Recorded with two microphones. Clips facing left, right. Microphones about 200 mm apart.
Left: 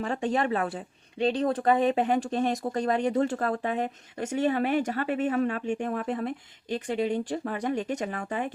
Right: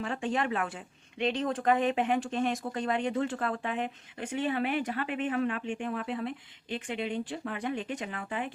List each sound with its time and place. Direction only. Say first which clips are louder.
0.0 s speech: left 4 dB; 40° left (ahead or behind)